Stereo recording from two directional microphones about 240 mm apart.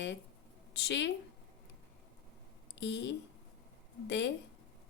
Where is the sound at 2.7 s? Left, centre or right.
Left.